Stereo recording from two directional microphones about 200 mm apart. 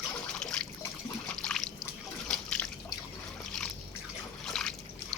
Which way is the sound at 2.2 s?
5° left (ahead or behind).